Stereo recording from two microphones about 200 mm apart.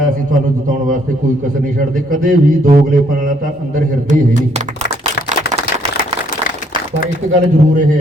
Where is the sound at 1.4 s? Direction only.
40° right (ahead or behind).